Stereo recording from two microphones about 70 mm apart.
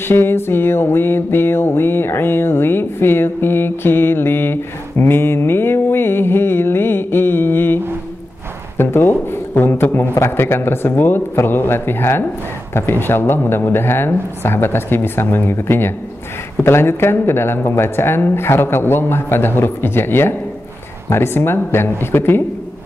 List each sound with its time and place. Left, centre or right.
0.1 s mantra: left
8.7 s speech: left